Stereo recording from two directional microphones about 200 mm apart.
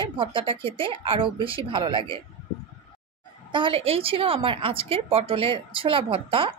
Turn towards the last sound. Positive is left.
turn(degrees=-25)  # may be behind; listen again after turning